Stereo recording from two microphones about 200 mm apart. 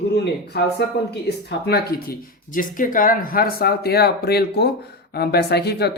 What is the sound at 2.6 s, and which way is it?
Speech, 45° left (ahead or behind).